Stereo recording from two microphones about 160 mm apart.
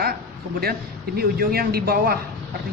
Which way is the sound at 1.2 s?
70° right (ahead or behind).